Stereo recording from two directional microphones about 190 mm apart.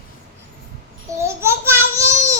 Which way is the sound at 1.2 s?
15° right (ahead or behind).